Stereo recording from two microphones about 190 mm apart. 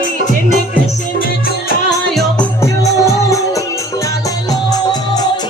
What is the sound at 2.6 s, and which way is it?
Music, 15° left (ahead or behind).